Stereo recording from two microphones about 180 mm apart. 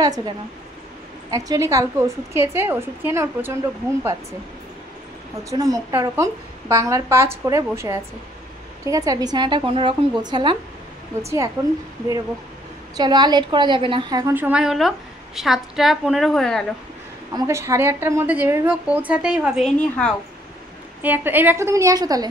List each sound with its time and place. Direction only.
1.3 s a woman's voice: 15° right (ahead or behind)
5.5 s a woman's voice: 20° right (ahead or behind)
12.9 s a woman's voice: 20° right (ahead or behind)
14.2 s a woman's voice: 10° right (ahead or behind)
17.3 s a woman's voice: 15° right (ahead or behind); by 20.2 s 5° left (ahead or behind)
21.0 s a woman's voice: 10° right (ahead or behind)